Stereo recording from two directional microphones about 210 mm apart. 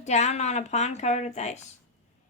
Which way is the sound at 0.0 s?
30° left (ahead or behind).